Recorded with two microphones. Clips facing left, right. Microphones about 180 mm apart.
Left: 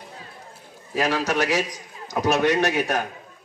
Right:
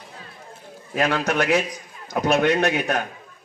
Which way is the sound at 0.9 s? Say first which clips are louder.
Right 1 dB; 55° right (ahead or behind).